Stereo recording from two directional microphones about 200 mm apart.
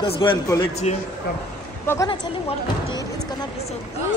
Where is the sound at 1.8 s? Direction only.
15° left (ahead or behind).